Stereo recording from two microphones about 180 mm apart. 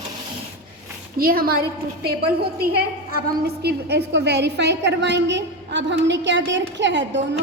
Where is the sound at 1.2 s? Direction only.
55° right (ahead or behind).